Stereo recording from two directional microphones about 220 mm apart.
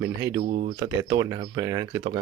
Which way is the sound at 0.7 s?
15° right (ahead or behind).